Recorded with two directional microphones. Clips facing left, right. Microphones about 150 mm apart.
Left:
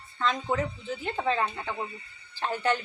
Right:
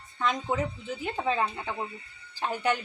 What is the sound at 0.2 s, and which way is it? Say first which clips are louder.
A woman's voice: even; 15° right (ahead or behind).